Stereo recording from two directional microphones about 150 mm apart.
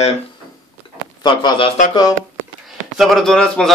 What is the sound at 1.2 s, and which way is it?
Speech, 35° left (ahead or behind).